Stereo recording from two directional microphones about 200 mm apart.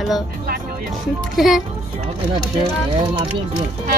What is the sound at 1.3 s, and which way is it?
Speech, centre (ahead or behind).